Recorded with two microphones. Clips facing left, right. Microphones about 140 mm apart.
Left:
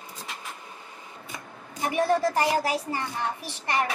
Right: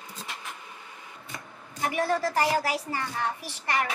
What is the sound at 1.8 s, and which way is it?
Speech, 25° left (ahead or behind).